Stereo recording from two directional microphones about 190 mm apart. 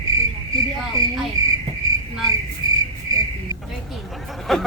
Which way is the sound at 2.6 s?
20° right (ahead or behind).